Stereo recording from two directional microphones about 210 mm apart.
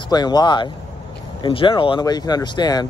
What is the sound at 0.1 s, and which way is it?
Speech, 20° left (ahead or behind).